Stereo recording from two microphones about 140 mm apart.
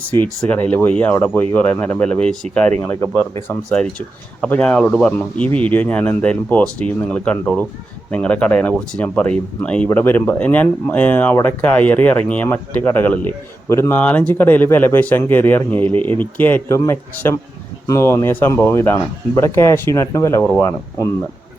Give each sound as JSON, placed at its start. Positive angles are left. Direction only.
{"t": 0.1, "sound": "speech", "side_deg": 10}